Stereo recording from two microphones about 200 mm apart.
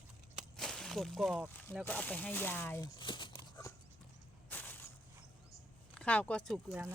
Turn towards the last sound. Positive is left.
turn(degrees=0)  # may be behind; listen again after turning